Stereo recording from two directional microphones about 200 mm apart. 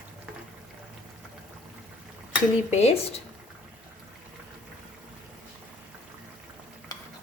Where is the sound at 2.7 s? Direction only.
35° left (ahead or behind).